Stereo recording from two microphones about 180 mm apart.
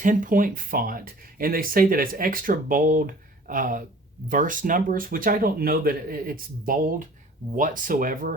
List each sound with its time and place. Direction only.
0.0 s speech: 45° right (ahead or behind)